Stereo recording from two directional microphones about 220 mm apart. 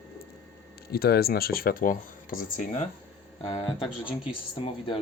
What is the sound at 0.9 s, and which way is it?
Speech, 45° left (ahead or behind).